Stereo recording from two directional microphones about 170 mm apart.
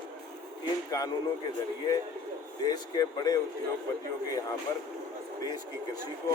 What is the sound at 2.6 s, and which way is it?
Speech, 25° left (ahead or behind).